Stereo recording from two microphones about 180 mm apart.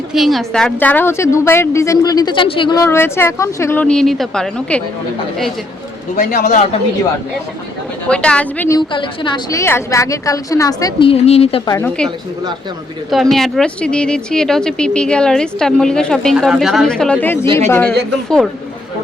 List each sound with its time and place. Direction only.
0.1 s a woman's voice: centre (ahead or behind); by 2.8 s 25° left (ahead or behind)
2.8 s a woman's voice: 15° left (ahead or behind)
6.1 s a man's voice: 50° left (ahead or behind)
8.0 s a woman's voice: 5° left (ahead or behind)
8.9 s a woman's voice: 25° left (ahead or behind)
11.1 s a woman's voice: 35° left (ahead or behind)
11.6 s a woman's voice: 20° left (ahead or behind)
13.3 s speech: centre (ahead or behind)
17.4 s a man's voice: 30° right (ahead or behind)
17.7 s a woman's voice: 10° left (ahead or behind)